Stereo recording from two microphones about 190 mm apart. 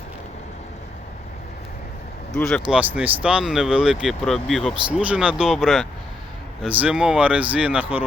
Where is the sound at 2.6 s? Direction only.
5° right (ahead or behind).